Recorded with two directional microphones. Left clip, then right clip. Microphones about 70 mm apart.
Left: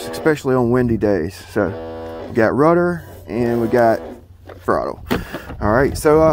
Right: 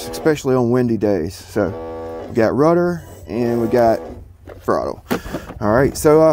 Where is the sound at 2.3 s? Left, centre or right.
Right.